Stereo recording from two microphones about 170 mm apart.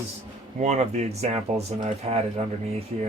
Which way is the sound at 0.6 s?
40° right (ahead or behind).